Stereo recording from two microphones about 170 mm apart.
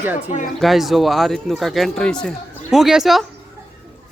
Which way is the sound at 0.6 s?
Centre (ahead or behind).